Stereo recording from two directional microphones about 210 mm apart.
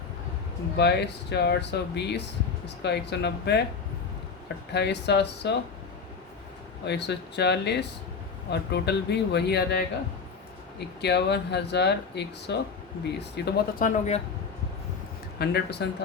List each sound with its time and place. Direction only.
0.8 s speech: 50° left (ahead or behind)
4.7 s speech: 55° left (ahead or behind)
6.8 s speech: 55° left (ahead or behind); by 14.2 s 35° left (ahead or behind)
15.4 s speech: 50° left (ahead or behind)